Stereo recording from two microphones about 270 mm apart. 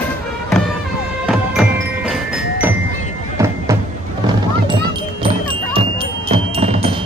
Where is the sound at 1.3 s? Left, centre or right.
Centre.